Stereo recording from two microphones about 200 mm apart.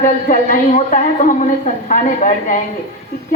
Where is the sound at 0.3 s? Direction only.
40° left (ahead or behind).